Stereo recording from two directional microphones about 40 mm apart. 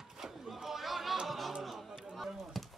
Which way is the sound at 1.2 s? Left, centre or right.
Centre.